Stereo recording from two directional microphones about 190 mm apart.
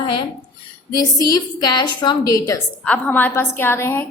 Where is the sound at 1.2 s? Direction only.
20° left (ahead or behind).